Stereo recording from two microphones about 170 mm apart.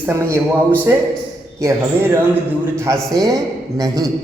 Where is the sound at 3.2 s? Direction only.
20° right (ahead or behind).